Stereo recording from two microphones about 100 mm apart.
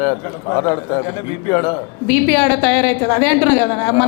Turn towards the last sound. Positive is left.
turn(degrees=25)  # may be behind; listen again after turning